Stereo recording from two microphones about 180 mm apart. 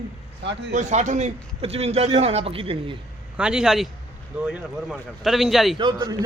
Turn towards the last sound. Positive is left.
turn(degrees=-25)  # may be behind; listen again after turning